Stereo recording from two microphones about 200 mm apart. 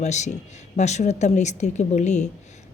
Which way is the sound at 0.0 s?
35° left (ahead or behind).